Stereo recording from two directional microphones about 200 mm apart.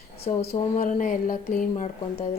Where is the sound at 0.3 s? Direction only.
35° left (ahead or behind).